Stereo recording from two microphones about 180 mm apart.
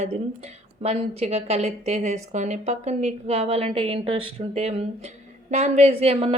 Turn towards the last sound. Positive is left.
turn(degrees=-35)  # may be behind; listen again after turning